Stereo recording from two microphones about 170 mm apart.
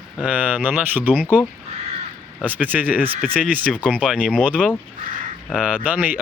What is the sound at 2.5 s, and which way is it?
Speech, 10° right (ahead or behind).